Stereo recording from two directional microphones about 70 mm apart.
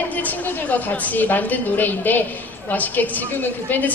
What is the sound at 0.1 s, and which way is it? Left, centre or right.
A woman's voice, left.